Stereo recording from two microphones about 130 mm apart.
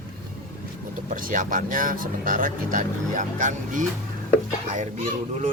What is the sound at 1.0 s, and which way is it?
Speech, 90° right.